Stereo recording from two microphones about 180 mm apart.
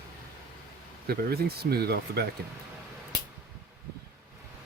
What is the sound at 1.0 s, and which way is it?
Speech, 60° right (ahead or behind).